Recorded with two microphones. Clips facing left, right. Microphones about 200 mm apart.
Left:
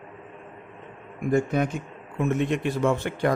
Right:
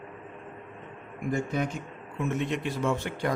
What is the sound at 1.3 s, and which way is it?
A man's voice, 55° left (ahead or behind).